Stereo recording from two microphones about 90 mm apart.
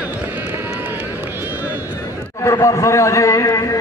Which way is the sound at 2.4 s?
35° left (ahead or behind).